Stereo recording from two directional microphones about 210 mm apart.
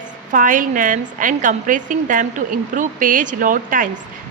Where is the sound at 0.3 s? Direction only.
40° right (ahead or behind).